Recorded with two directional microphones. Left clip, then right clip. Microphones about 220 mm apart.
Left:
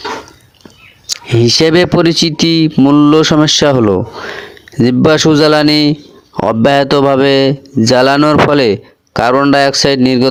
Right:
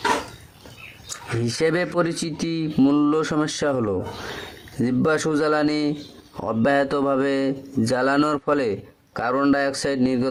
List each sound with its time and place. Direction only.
1.0 s a man's voice: 35° left (ahead or behind)